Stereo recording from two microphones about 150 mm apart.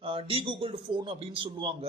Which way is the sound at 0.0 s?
40° right (ahead or behind).